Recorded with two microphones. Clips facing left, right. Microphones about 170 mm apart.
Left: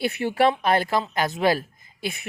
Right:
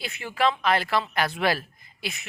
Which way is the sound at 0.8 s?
45° left (ahead or behind).